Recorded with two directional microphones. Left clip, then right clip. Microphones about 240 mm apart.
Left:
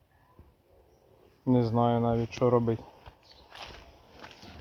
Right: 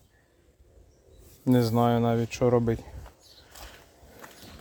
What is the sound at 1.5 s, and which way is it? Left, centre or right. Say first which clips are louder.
Speech: right 2 dB; right.